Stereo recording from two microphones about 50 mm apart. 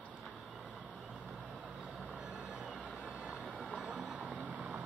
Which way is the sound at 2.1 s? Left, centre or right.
Right.